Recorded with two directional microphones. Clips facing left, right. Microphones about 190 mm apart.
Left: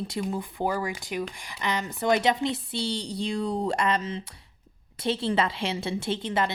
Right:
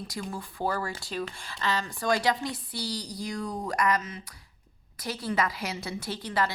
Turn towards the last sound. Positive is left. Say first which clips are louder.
# left 3 dB
turn(degrees=20)  # may be behind; listen again after turning